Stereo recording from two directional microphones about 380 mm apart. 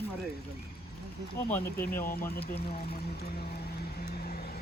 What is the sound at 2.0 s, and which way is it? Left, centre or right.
Speech, left.